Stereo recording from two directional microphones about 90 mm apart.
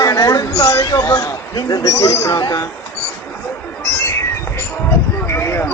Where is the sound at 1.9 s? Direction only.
35° left (ahead or behind).